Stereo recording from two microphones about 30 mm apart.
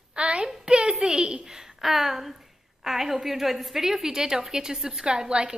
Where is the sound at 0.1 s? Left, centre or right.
Right.